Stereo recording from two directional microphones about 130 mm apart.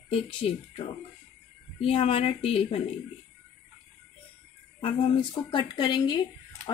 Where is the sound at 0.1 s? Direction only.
50° left (ahead or behind).